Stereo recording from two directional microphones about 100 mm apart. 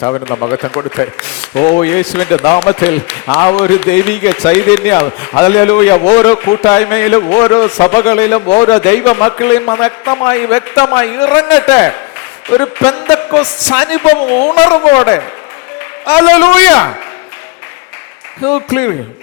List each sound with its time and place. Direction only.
0.3 s speech: 35° left (ahead or behind)
18.4 s speech: 30° left (ahead or behind)